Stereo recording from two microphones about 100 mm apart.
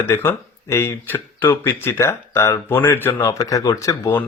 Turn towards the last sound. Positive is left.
turn(degrees=30)  # may be behind; listen again after turning